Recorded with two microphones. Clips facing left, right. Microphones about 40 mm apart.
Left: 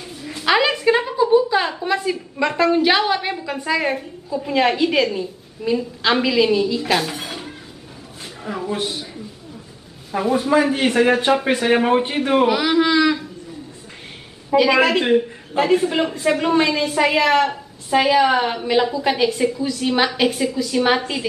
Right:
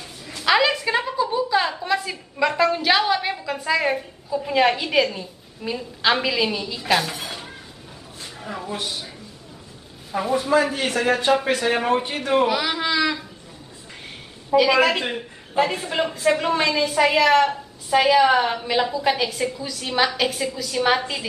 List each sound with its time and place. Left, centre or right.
0.4 s a woman's voice: centre
10.1 s a man's voice: centre
14.5 s a man's voice: centre